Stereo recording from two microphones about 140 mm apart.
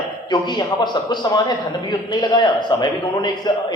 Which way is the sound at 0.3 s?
30° left (ahead or behind).